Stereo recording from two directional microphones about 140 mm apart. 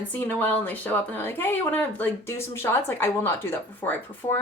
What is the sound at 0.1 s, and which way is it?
Speech, 10° left (ahead or behind).